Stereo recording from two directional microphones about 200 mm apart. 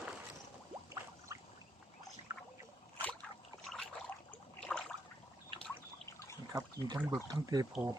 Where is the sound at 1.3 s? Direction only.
15° right (ahead or behind).